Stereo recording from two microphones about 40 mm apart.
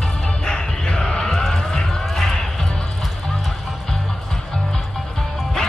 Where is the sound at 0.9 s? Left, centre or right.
Left.